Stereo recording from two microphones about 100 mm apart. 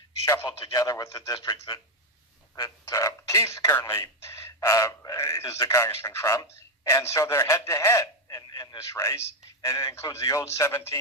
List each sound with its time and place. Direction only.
0.4 s a man's voice: 40° left (ahead or behind)
2.6 s speech: 35° left (ahead or behind)
8.9 s speech: 25° left (ahead or behind)